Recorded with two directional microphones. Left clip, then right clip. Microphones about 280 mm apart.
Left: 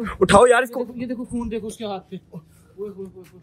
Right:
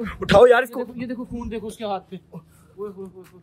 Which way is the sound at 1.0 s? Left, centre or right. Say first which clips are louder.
Left 2 dB; right.